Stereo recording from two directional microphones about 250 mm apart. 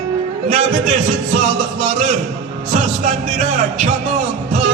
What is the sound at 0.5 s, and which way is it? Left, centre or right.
A man's voice, right.